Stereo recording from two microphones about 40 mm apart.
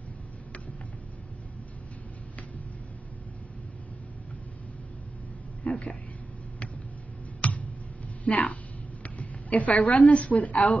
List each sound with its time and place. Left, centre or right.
5.7 s a sound: left
7.4 s tick: left
8.2 s a woman's voice: left